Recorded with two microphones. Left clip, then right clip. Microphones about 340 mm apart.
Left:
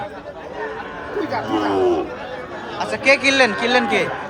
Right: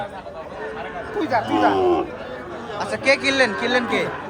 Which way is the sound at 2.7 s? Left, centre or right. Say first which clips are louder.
Left 3 dB; centre.